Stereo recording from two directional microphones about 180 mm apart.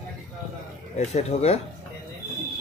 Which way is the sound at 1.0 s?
40° left (ahead or behind).